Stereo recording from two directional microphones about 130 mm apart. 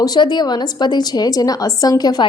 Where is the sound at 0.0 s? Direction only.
30° left (ahead or behind).